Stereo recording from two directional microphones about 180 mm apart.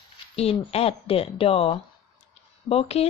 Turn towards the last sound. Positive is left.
turn(degrees=35)  # may be behind; listen again after turning